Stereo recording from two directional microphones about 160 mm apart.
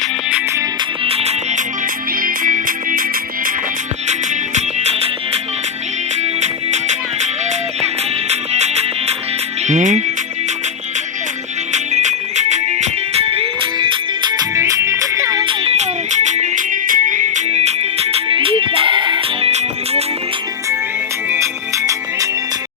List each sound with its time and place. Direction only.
1.0 s music: 40° right (ahead or behind)
2.2 s music: 60° right (ahead or behind)
4.5 s music: 45° right (ahead or behind)
6.4 s music: 45° right (ahead or behind)
8.3 s music: 45° right (ahead or behind)
9.6 s speech: 50° right (ahead or behind)
11.7 s music: 45° right (ahead or behind); by 15.5 s 20° right (ahead or behind)
15.6 s music: 45° right (ahead or behind)
19.5 s music: 40° right (ahead or behind)
21.2 s music: 15° right (ahead or behind)